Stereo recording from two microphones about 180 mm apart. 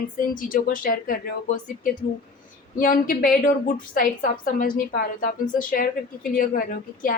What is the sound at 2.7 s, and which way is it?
Speech, 50° left (ahead or behind).